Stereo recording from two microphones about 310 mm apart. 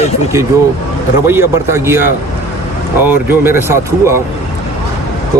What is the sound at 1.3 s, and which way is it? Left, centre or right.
Speech, centre.